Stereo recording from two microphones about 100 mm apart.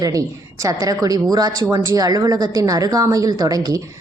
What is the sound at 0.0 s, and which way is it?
A woman's voice, 35° right (ahead or behind).